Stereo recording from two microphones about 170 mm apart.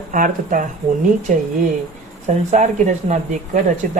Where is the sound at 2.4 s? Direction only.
45° right (ahead or behind).